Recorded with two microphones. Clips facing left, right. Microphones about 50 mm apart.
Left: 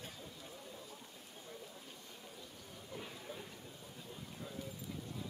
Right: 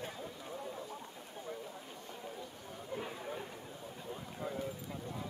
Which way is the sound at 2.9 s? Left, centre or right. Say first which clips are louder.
Right 7 dB; right.